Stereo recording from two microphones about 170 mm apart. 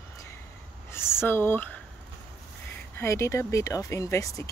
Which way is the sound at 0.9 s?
15° left (ahead or behind).